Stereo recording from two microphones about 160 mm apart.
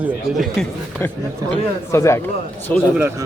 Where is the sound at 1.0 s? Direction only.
15° left (ahead or behind).